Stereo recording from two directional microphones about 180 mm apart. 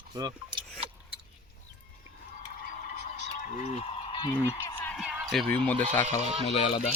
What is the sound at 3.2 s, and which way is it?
Honk, 40° left (ahead or behind).